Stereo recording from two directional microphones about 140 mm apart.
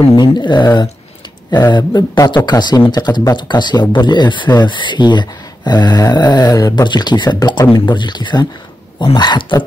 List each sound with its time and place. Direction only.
0.1 s speech: 30° left (ahead or behind)